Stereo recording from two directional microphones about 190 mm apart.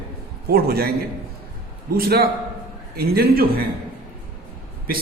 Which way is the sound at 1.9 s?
55° right (ahead or behind).